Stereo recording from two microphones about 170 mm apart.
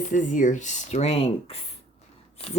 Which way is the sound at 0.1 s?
45° left (ahead or behind).